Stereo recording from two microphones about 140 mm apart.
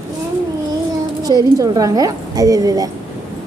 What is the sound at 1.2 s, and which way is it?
Speech, 25° right (ahead or behind).